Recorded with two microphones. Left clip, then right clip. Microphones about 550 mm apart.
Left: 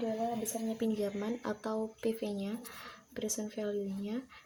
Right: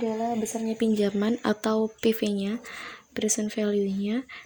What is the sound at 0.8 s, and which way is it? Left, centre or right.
Speech, left.